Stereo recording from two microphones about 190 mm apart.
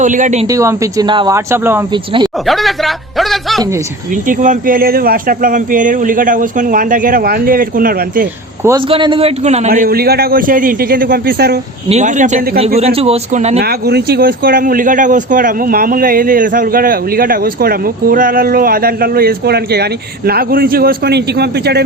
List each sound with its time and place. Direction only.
0.0 s a man's voice: 40° right (ahead or behind)
0.4 s speech: 15° right (ahead or behind)
1.9 s a man's voice: 25° right (ahead or behind)
2.5 s a man's voice: centre (ahead or behind)
4.3 s speech: 45° right (ahead or behind)
8.9 s a man's voice: 25° right (ahead or behind)
9.6 s speech: 45° right (ahead or behind)
11.9 s a man's voice: 40° right (ahead or behind)
13.6 s speech: 55° right (ahead or behind)